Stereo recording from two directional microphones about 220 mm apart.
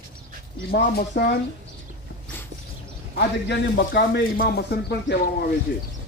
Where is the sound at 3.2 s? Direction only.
50° left (ahead or behind).